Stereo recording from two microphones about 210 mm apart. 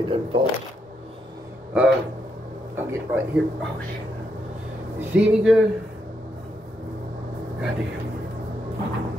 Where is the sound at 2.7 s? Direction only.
10° right (ahead or behind).